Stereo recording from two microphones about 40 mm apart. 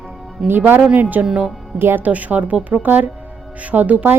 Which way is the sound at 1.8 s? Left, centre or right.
Right.